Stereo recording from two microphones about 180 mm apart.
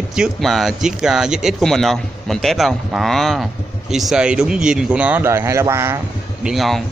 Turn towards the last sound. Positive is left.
turn(degrees=0)  # may be behind; listen again after turning